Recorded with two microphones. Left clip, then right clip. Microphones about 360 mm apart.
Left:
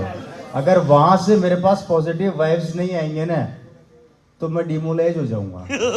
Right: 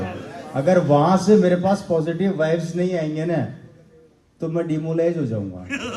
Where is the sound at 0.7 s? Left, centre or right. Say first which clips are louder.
Left 4 dB; centre.